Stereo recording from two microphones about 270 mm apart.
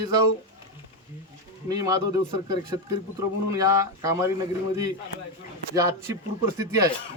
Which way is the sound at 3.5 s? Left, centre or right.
Centre.